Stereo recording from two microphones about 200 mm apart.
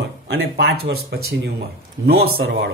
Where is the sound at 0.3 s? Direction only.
55° right (ahead or behind).